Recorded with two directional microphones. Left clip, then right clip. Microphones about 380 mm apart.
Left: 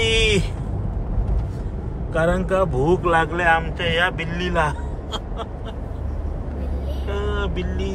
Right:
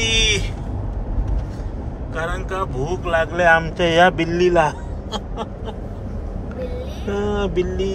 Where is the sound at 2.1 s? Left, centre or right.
Centre.